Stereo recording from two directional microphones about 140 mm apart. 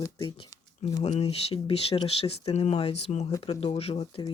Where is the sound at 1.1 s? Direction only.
45° left (ahead or behind).